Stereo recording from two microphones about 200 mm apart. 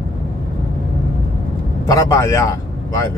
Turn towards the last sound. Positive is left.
turn(degrees=15)  # may be behind; listen again after turning